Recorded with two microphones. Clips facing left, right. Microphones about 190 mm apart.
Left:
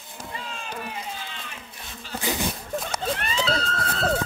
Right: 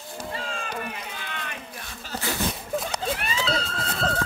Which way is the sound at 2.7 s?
5° right (ahead or behind).